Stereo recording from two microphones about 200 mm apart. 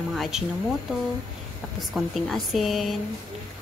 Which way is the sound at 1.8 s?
Centre (ahead or behind).